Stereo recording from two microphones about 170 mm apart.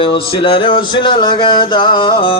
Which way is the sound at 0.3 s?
30° left (ahead or behind).